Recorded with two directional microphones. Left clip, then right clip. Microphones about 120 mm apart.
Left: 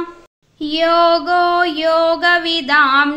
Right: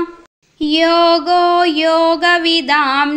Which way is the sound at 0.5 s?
30° right (ahead or behind).